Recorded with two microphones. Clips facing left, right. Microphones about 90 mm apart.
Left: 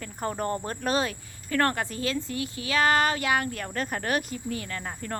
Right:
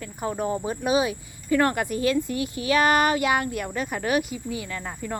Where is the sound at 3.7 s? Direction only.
5° right (ahead or behind).